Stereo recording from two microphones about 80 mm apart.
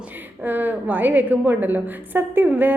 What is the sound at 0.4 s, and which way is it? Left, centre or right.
Speech, right.